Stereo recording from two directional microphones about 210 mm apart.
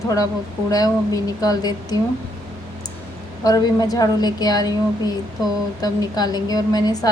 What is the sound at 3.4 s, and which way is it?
Speech, 20° left (ahead or behind).